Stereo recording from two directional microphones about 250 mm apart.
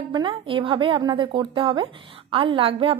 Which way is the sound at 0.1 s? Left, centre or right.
Centre.